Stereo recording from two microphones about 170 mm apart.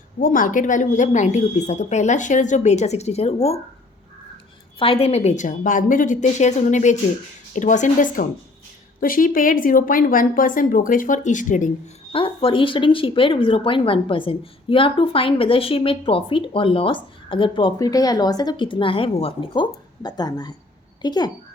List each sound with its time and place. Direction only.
0.2 s speech: 50° left (ahead or behind)
4.8 s speech: 35° left (ahead or behind)
12.1 s a woman's voice: 30° left (ahead or behind)